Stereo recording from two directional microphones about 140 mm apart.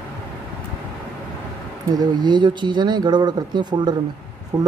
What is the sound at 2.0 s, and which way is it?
Speech, 30° right (ahead or behind).